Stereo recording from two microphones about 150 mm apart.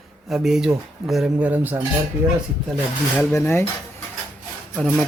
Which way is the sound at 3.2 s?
15° left (ahead or behind).